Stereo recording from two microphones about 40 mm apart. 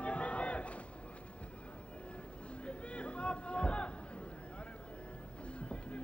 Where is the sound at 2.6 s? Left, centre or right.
Left.